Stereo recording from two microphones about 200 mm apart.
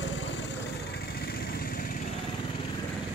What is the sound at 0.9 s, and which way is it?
Vehicle, 50° left (ahead or behind).